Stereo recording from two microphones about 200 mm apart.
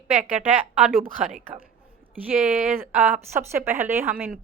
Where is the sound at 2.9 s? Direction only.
10° right (ahead or behind).